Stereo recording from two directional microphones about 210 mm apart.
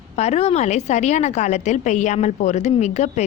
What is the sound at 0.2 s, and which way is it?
A woman's voice, 30° left (ahead or behind).